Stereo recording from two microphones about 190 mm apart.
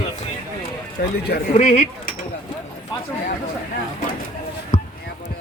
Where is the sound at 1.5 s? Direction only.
35° left (ahead or behind).